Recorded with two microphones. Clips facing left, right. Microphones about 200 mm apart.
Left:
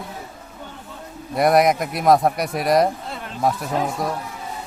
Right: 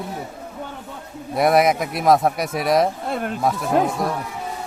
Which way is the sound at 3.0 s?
55° right (ahead or behind).